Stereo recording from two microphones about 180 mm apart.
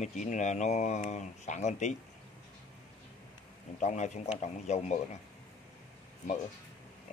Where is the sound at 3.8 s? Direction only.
40° left (ahead or behind).